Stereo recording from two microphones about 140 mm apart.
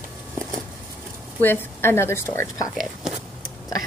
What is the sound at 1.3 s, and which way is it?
A woman's voice, 15° left (ahead or behind).